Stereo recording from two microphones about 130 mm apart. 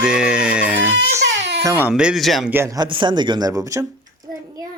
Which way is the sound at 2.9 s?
40° right (ahead or behind).